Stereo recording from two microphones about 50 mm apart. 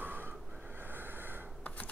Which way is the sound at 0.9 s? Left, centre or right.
Right.